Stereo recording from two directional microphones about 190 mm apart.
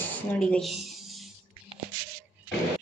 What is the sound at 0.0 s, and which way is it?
Speech, 5° left (ahead or behind).